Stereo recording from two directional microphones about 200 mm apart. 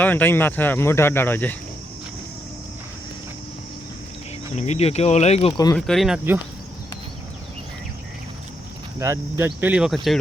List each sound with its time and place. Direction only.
0.0 s speech: 10° left (ahead or behind)
4.5 s speech: 35° left (ahead or behind)
5.7 s speech: centre (ahead or behind)
9.0 s speech: 15° right (ahead or behind)